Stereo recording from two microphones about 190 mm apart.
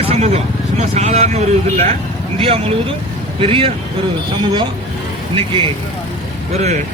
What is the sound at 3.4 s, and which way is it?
Speech, 30° right (ahead or behind).